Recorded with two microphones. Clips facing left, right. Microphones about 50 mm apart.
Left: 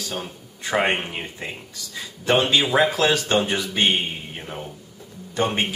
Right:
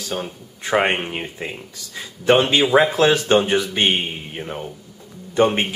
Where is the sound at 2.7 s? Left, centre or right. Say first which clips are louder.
Right 6 dB; centre.